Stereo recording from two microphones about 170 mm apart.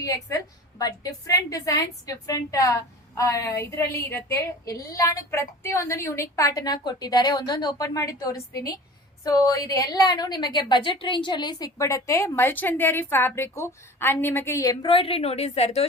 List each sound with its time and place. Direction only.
0.0 s a woman's voice: 20° left (ahead or behind); by 15.9 s 40° left (ahead or behind)